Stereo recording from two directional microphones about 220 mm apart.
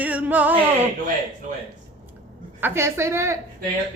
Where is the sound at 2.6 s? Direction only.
10° right (ahead or behind).